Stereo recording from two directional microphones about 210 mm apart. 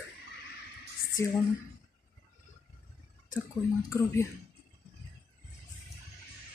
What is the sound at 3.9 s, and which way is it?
Speech, 15° left (ahead or behind).